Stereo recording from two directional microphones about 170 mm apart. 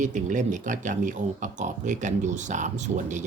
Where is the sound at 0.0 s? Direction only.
50° right (ahead or behind).